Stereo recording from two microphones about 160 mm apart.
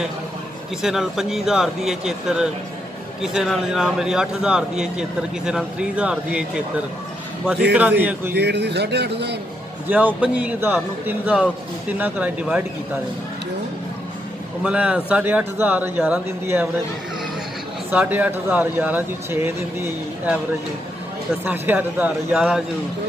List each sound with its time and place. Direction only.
0.8 s a man's voice: centre (ahead or behind)
8.0 s speech: 10° right (ahead or behind)
8.4 s a man's voice: 90° right
9.8 s speech: 10° right (ahead or behind)
14.6 s speech: 5° right (ahead or behind)
17.9 s speech: 10° right (ahead or behind)
21.5 s speech: 10° right (ahead or behind)